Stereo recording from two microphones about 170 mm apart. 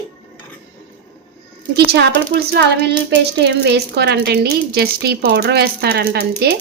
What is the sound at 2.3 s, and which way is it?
Speech, 70° right (ahead or behind).